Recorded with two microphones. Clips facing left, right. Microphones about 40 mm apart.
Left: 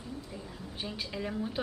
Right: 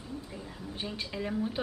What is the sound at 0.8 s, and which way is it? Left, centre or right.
Speech, centre.